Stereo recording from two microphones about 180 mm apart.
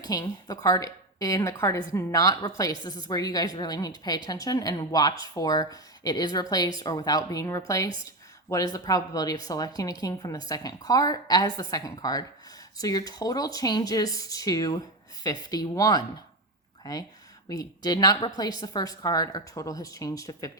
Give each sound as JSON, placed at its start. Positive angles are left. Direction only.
{"t": 0.0, "sound": "a woman's voice", "side_deg": 20}